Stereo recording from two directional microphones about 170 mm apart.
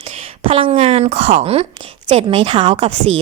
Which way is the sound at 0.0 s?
35° right (ahead or behind).